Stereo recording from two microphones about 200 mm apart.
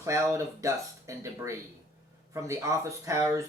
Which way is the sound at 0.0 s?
15° right (ahead or behind).